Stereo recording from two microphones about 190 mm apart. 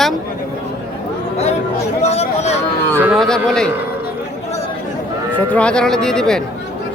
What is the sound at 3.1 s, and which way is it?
Speech, 5° left (ahead or behind).